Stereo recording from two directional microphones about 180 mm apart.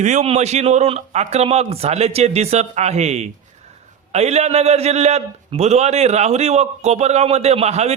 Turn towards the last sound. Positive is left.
turn(degrees=-35)  # may be behind; listen again after turning